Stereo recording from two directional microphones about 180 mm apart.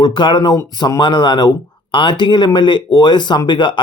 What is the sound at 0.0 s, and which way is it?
Speech, 25° left (ahead or behind).